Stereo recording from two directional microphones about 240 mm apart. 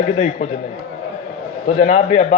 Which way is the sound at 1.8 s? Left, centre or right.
Left.